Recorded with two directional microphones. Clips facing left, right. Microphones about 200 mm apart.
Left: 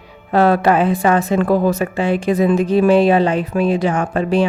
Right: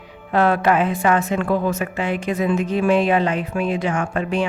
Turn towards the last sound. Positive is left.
turn(degrees=35)  # may be behind; listen again after turning